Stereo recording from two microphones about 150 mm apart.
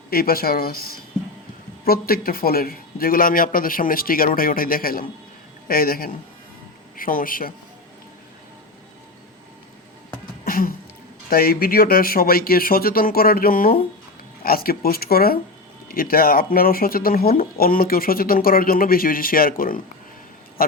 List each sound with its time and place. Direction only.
0.1 s speech: 80° left
10.4 s a sound: 75° left (ahead or behind)
11.3 s speech: 80° left
15.9 s speech: 75° left (ahead or behind)